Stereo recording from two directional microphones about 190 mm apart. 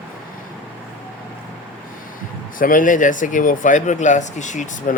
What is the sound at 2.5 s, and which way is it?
Speech, 45° left (ahead or behind).